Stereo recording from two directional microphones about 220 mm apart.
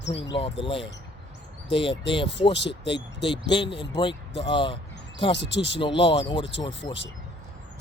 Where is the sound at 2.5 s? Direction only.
50° left (ahead or behind).